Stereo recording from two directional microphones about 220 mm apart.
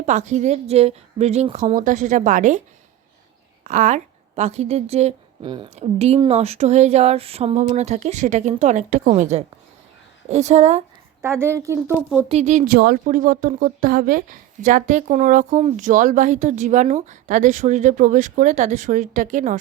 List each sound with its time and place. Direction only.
0.0 s speech: 30° right (ahead or behind)
3.7 s a woman's voice: 35° right (ahead or behind)
11.2 s speech: 10° right (ahead or behind)
12.3 s speech: 30° right (ahead or behind)